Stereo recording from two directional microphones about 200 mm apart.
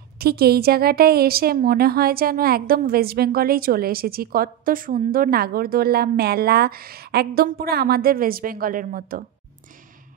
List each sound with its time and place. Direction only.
0.2 s a woman's voice: 50° right (ahead or behind)